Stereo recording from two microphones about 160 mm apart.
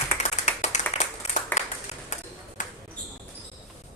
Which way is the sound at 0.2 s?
45° left (ahead or behind).